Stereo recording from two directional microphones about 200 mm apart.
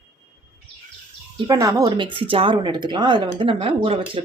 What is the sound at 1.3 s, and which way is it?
Speech, 20° right (ahead or behind).